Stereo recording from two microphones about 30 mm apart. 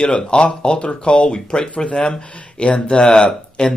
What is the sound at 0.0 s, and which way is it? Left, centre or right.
Speech, left.